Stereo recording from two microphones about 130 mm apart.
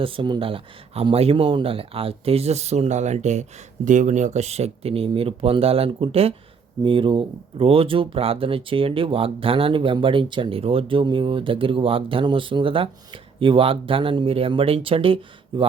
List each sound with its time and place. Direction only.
0.0 s speech: 40° right (ahead or behind)